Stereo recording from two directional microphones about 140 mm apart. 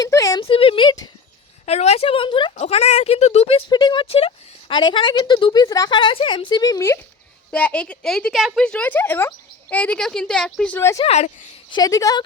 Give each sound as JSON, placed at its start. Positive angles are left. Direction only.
{"t": 0.0, "sound": "a sound", "side_deg": 25}
{"t": 0.4, "sound": "speech", "side_deg": 40}
{"t": 1.6, "sound": "speech", "side_deg": 50}
{"t": 2.6, "sound": "speech", "side_deg": 50}
{"t": 3.7, "sound": "speech", "side_deg": 30}
{"t": 7.5, "sound": "speech", "side_deg": 10}
{"t": 10.8, "sound": "speech", "side_deg": 20}
{"t": 11.0, "sound": "speech", "side_deg": 50}
{"t": 11.7, "sound": "speech", "side_deg": 25}